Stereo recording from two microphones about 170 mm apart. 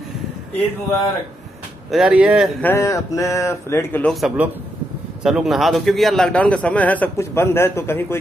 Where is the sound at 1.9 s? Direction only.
5° right (ahead or behind).